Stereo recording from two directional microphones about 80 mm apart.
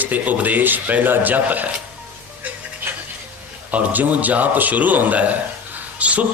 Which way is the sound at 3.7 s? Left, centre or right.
Right.